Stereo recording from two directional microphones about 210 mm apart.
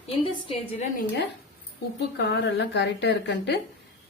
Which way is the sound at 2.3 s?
55° left (ahead or behind).